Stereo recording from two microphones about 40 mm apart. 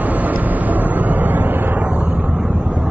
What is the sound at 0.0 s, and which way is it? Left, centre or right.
Vehicle, right.